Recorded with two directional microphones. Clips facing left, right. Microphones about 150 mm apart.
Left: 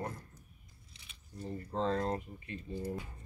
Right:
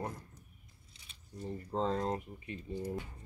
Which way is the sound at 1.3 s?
20° right (ahead or behind).